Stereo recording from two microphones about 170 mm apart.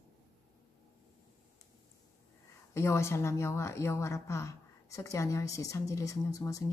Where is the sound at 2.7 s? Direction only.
15° left (ahead or behind).